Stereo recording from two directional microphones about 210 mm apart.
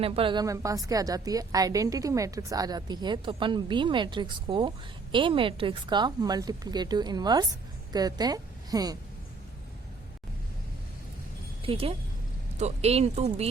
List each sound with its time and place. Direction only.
0.0 s a woman's voice: 25° right (ahead or behind)
11.6 s a woman's voice: 25° right (ahead or behind)